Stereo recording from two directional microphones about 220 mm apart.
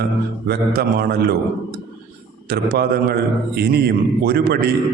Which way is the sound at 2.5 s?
45° right (ahead or behind).